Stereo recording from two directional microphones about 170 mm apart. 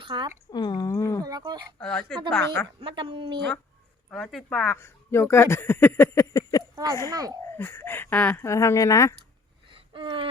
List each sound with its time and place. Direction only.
0.0 s speech: 30° right (ahead or behind)
0.5 s a sound: 25° left (ahead or behind)
1.2 s a woman's voice: 25° right (ahead or behind)
1.8 s speech: 5° left (ahead or behind)
2.8 s a woman's voice: 30° right (ahead or behind)
4.1 s speech: 5° left (ahead or behind)
7.1 s a woman's voice: 20° right (ahead or behind)
7.5 s speech: 15° left (ahead or behind)
9.6 s a sound: 30° right (ahead or behind)